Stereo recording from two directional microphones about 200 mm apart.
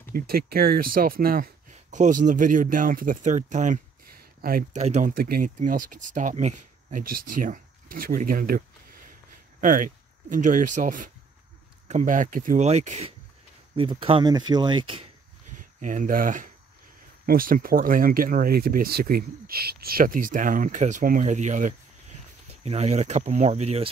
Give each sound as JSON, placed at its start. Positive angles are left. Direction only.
{"t": 0.1, "sound": "speech", "side_deg": -50}
{"t": 15.8, "sound": "speech", "side_deg": -40}